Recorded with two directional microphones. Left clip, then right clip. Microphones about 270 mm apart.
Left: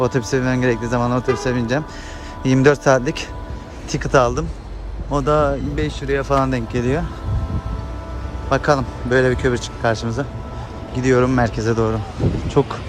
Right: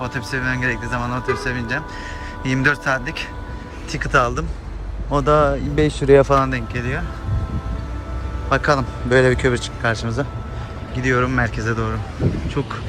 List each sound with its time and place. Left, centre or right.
0.0 s a man's voice: left
5.8 s speech: centre
6.3 s speech: centre
8.4 s a man's voice: centre